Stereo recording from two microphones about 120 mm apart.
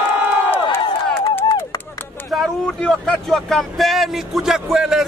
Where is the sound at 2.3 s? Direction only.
5° left (ahead or behind).